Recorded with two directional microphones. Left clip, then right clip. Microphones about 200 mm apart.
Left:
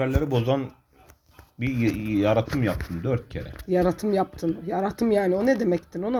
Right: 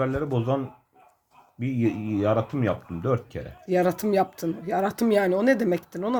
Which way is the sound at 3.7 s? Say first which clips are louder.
Even; 25° right (ahead or behind).